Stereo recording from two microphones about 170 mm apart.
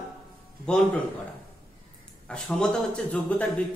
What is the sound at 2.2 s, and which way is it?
A man's voice, 5° left (ahead or behind).